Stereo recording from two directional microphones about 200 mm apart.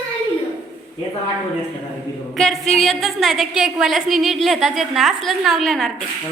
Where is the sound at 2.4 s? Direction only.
Centre (ahead or behind).